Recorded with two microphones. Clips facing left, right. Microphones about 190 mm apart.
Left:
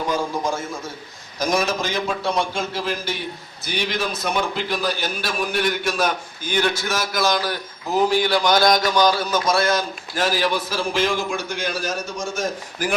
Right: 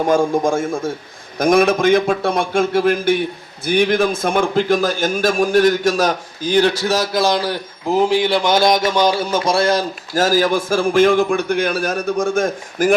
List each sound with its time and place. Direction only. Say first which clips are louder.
0.0 s a man's voice: right 8 dB; 50° right (ahead or behind)